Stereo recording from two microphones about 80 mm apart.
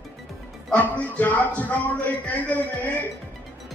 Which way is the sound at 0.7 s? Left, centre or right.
Centre.